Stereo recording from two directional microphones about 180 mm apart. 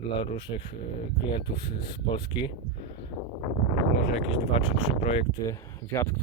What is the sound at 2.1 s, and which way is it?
Speech, 25° left (ahead or behind).